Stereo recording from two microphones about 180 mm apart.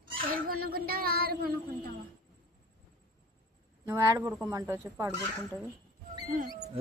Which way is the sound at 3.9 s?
20° right (ahead or behind).